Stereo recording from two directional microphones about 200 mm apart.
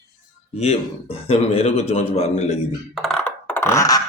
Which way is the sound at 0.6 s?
30° left (ahead or behind).